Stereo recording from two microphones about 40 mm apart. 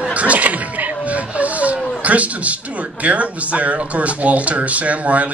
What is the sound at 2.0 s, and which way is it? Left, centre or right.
A man's voice, right.